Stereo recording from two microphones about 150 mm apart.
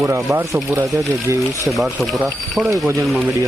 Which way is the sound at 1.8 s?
Centre (ahead or behind).